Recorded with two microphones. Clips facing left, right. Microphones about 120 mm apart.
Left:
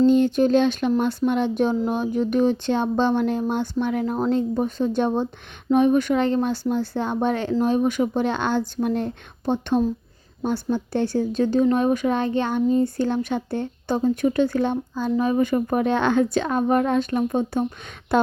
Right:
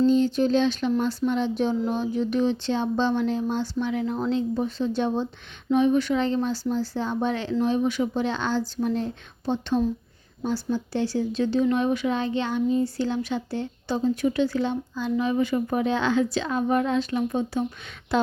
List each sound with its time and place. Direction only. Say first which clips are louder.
0.0 s speech: left 3 dB; 55° left (ahead or behind)